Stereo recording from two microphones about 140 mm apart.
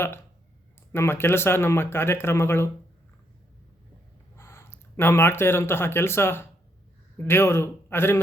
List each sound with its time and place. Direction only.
0.9 s speech: 15° left (ahead or behind)
4.4 s speech: 20° left (ahead or behind)